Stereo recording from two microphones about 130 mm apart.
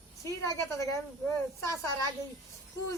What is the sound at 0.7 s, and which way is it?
Speech, 25° left (ahead or behind).